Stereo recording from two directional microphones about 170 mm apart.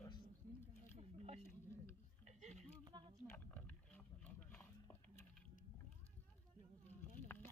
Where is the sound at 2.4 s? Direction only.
45° right (ahead or behind).